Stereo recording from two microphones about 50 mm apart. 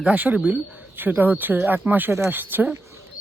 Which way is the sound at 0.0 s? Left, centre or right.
Right.